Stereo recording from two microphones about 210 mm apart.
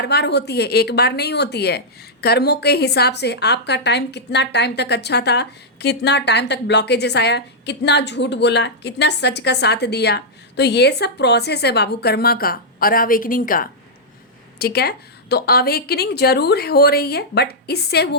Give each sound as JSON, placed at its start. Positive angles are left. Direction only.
{"t": 0.0, "sound": "a woman's voice", "side_deg": 50}